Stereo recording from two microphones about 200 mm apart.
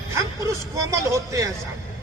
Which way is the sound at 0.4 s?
15° right (ahead or behind).